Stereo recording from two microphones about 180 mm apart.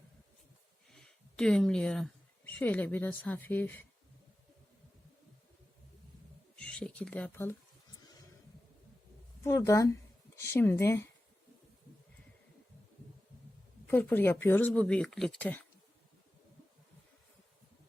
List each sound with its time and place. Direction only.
0.9 s speech: 5° left (ahead or behind)
6.6 s speech: 5° left (ahead or behind)
9.4 s speech: 15° left (ahead or behind)
13.8 s speech: 10° left (ahead or behind)